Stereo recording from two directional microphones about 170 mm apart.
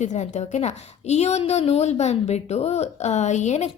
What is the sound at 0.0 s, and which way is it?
A woman's voice, 45° left (ahead or behind).